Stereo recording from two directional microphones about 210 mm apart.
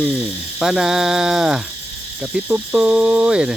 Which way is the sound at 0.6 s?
Centre (ahead or behind).